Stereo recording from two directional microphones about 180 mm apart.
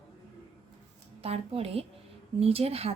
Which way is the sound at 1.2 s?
35° right (ahead or behind).